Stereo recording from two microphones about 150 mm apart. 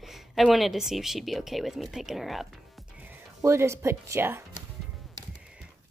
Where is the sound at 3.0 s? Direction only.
15° right (ahead or behind).